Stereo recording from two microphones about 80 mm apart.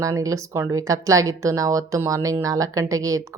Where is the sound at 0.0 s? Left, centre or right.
Right.